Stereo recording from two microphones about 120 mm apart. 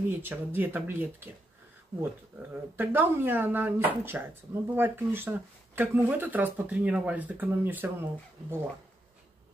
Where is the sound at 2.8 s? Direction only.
15° right (ahead or behind).